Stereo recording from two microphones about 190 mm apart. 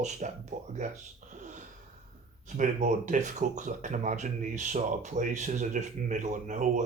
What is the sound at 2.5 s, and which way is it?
Speech, 40° right (ahead or behind).